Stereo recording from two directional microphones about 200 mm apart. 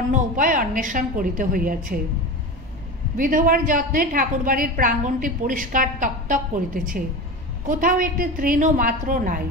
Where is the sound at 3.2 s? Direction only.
45° right (ahead or behind).